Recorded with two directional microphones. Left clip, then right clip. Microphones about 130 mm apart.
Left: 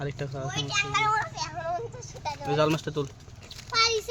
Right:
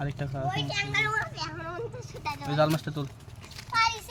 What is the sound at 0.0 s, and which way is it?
Speech, 25° left (ahead or behind).